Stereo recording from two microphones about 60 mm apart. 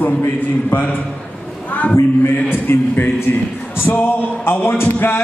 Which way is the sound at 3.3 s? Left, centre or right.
Left.